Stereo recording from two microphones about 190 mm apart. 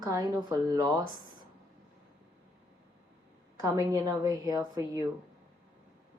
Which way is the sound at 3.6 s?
20° right (ahead or behind).